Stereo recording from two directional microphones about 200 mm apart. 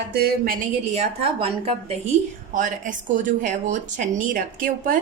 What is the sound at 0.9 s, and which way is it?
A woman's voice, 30° right (ahead or behind).